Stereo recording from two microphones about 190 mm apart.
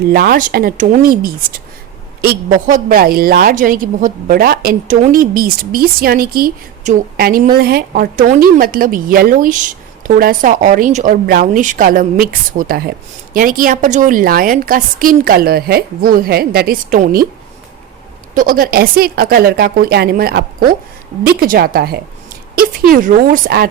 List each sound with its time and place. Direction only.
0.1 s a woman's voice: 50° right (ahead or behind)
18.3 s a woman's voice: 50° right (ahead or behind)